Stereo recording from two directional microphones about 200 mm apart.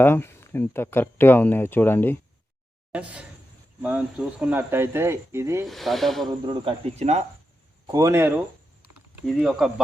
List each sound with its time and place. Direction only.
0.0 s speech: 10° left (ahead or behind)
2.9 s speech: 5° right (ahead or behind)
5.6 s speech: centre (ahead or behind)
6.2 s speech: 20° right (ahead or behind)
7.9 s speech: 15° right (ahead or behind)
9.2 s speech: centre (ahead or behind)